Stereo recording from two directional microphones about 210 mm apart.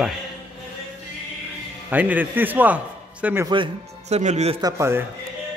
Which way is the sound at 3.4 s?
25° right (ahead or behind).